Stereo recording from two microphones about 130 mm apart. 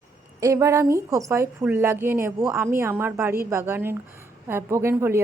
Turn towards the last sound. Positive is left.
turn(degrees=-20)  # may be behind; listen again after turning